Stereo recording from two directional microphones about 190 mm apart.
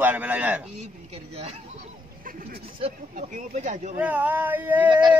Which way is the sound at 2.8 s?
40° right (ahead or behind).